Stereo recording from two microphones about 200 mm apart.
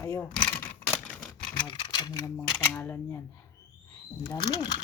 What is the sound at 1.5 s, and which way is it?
Speech, 25° left (ahead or behind).